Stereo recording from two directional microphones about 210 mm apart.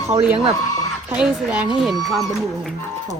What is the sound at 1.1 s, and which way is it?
Speech, 5° right (ahead or behind).